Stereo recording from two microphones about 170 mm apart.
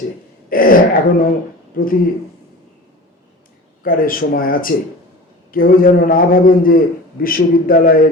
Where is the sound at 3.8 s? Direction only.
55° left (ahead or behind).